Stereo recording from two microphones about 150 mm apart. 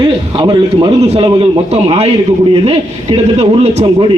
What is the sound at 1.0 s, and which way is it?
A man's voice, 40° right (ahead or behind).